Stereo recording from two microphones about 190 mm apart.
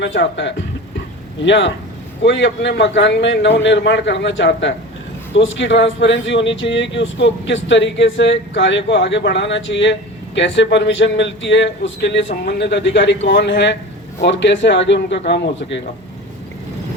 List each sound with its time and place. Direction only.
0.0 s speech: 75° left (ahead or behind)